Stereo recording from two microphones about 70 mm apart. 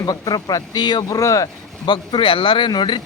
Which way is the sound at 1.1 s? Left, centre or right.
Left.